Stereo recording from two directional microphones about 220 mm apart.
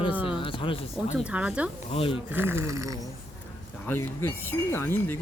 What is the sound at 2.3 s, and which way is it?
Speech, 10° right (ahead or behind).